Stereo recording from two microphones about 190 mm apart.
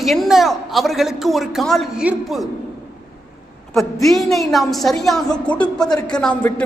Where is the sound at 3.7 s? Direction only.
Centre (ahead or behind).